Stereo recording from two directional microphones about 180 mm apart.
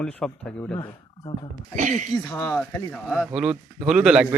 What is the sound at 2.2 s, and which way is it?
Speech, 15° left (ahead or behind).